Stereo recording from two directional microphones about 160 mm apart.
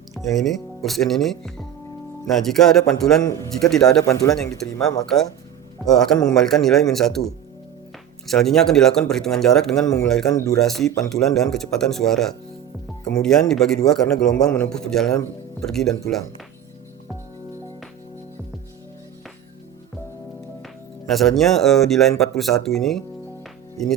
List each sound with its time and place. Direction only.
0.1 s a man's voice: centre (ahead or behind)
4.0 s speech: 20° left (ahead or behind)
5.0 s a man's voice: centre (ahead or behind)
8.3 s a man's voice: centre (ahead or behind)
9.8 s speech: 20° left (ahead or behind)
10.1 s a man's voice: 5° left (ahead or behind)
10.3 s speech: 20° left (ahead or behind)
10.6 s a man's voice: centre (ahead or behind)
21.1 s a man's voice: centre (ahead or behind)